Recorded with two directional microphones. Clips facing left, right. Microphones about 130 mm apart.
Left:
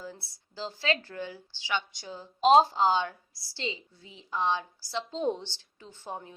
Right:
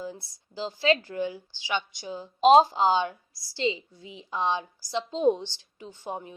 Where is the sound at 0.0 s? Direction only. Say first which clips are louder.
Right 6 dB; 15° right (ahead or behind).